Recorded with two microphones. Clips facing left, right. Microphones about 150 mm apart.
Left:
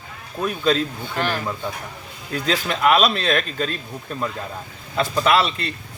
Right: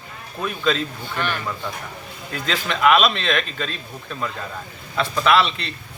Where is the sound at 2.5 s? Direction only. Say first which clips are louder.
Even; 40° left (ahead or behind).